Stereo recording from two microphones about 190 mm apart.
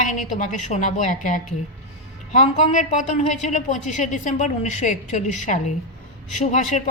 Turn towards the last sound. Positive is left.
turn(degrees=40)  # may be behind; listen again after turning